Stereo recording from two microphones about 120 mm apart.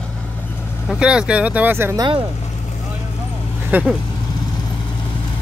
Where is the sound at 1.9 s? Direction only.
40° right (ahead or behind).